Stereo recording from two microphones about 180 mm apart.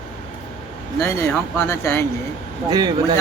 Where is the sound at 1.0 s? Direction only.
15° left (ahead or behind).